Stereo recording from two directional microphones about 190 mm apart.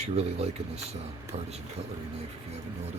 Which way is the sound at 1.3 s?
35° right (ahead or behind).